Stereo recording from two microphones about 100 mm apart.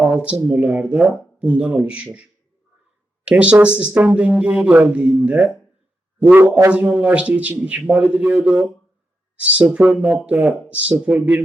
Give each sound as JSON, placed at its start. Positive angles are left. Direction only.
{"t": 0.2, "sound": "speech", "side_deg": -15}
{"t": 3.2, "sound": "speech", "side_deg": -10}